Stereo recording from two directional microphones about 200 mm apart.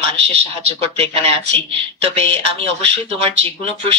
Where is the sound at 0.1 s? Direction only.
30° right (ahead or behind).